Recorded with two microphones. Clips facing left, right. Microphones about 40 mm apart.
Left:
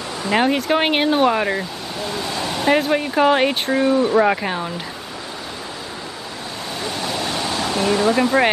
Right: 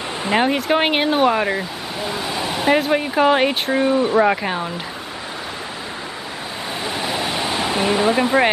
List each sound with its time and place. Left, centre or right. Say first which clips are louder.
0.3 s speech: even; centre
2.0 s vehicle: right 1 dB; centre
2.7 s speech: even; centre
6.8 s waves: right 1 dB; centre